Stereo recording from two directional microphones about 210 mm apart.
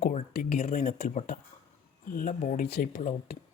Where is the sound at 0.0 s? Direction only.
35° left (ahead or behind).